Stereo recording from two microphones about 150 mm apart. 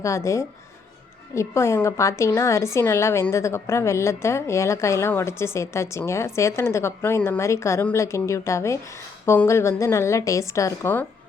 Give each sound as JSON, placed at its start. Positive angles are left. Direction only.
{"t": 0.0, "sound": "a woman's voice", "side_deg": 20}